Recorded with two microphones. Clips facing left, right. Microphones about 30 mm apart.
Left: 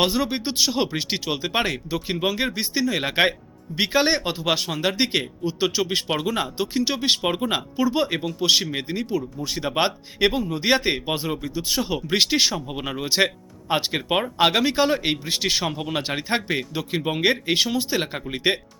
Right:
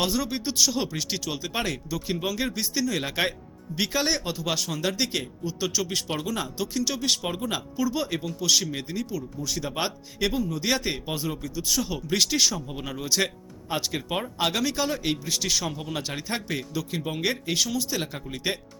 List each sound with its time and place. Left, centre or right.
0.0 s speech: left